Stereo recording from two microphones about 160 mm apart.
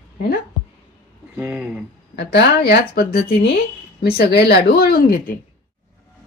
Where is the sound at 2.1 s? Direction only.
90° left; by 5.3 s 70° left (ahead or behind).